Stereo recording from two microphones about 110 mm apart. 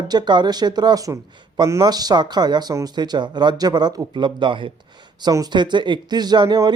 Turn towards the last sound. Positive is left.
turn(degrees=-40)  # may be behind; listen again after turning